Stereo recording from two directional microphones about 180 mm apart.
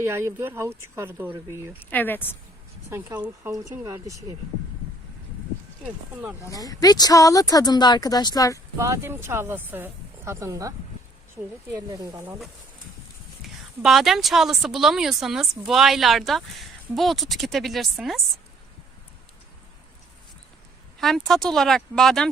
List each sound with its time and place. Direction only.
0.0 s speech: 15° right (ahead or behind)
1.9 s a woman's voice: 10° left (ahead or behind)
2.9 s speech: 15° right (ahead or behind)
5.8 s speech: 10° right (ahead or behind)
6.5 s speech: 20° left (ahead or behind)
8.8 s speech: 15° right (ahead or behind)
12.0 s speech: 15° right (ahead or behind)
13.8 s speech: centre (ahead or behind)
21.0 s speech: centre (ahead or behind)